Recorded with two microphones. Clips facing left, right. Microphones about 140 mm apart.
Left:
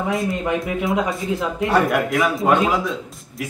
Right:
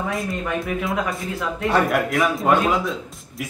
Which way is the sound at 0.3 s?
20° left (ahead or behind).